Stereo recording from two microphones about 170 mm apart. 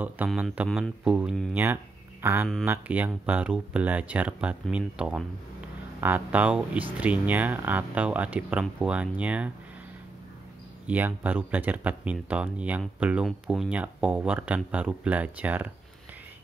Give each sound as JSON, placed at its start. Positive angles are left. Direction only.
{"t": 0.3, "sound": "speech", "side_deg": -10}
{"t": 1.5, "sound": "speech", "side_deg": -10}
{"t": 10.9, "sound": "speech", "side_deg": -10}